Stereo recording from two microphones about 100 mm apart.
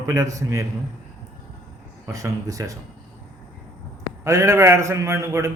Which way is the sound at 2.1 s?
35° right (ahead or behind).